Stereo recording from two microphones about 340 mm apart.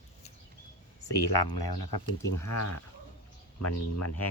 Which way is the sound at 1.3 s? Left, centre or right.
Left.